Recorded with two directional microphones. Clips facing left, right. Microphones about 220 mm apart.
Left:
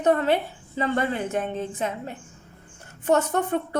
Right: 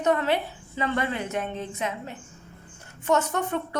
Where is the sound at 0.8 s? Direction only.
45° left (ahead or behind).